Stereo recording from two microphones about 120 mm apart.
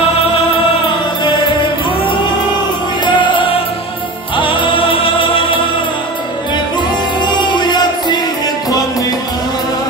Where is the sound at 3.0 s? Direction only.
40° left (ahead or behind).